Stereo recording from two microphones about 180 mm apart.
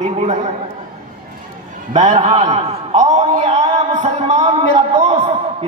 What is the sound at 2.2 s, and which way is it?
Speech, 30° right (ahead or behind).